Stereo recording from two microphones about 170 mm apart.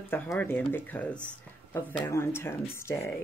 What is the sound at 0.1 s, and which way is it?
Speech, 15° left (ahead or behind).